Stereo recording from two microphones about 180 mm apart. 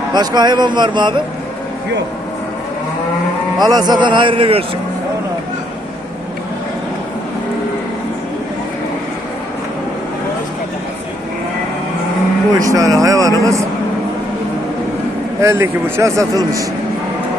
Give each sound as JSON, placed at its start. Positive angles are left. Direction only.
{"t": 0.1, "sound": "speech", "side_deg": -25}
{"t": 3.6, "sound": "speech", "side_deg": -25}
{"t": 12.5, "sound": "a man's voice", "side_deg": -20}
{"t": 15.4, "sound": "a man's voice", "side_deg": -15}